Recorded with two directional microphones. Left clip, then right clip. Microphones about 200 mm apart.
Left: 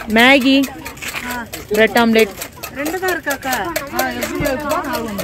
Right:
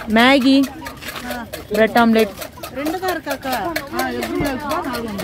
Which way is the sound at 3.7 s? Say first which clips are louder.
Left 2 dB; 60° left (ahead or behind).